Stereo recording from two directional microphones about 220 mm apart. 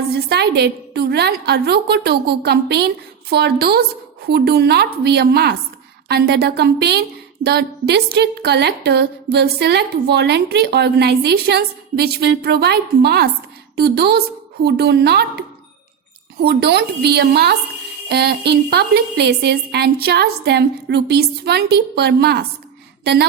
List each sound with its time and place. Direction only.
0.1 s a woman's voice: 50° right (ahead or behind)